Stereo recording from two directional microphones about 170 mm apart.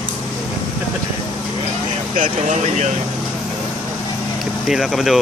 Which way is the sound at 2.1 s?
45° right (ahead or behind).